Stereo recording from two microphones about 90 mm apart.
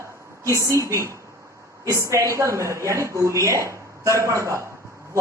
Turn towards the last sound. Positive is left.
turn(degrees=-35)  # may be behind; listen again after turning